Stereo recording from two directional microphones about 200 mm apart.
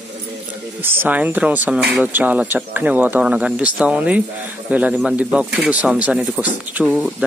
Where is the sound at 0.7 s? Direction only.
10° right (ahead or behind).